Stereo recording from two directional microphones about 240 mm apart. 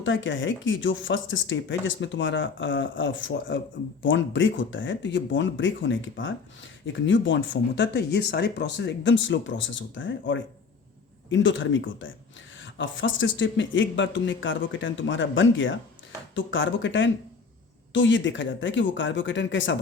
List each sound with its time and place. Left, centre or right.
0.0 s speech: left